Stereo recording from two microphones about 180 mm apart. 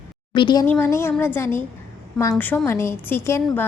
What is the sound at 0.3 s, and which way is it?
Speech, 25° left (ahead or behind).